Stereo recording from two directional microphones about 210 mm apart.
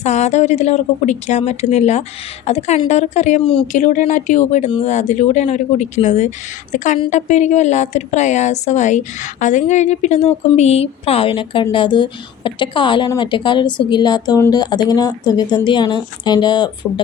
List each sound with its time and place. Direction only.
0.0 s a woman's voice: 30° left (ahead or behind)